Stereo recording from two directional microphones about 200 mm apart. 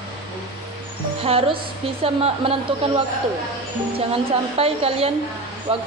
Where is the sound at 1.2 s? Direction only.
30° right (ahead or behind).